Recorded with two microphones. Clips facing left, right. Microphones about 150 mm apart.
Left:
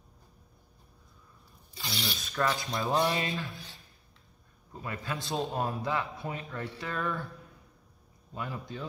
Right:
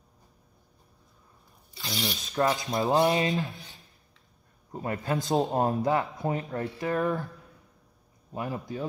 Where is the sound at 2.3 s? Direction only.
20° right (ahead or behind).